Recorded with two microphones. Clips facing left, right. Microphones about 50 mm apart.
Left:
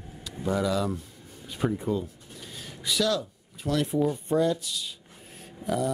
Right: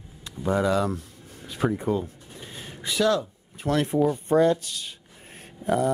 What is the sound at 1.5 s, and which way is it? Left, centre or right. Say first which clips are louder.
Speech: right 3 dB; right.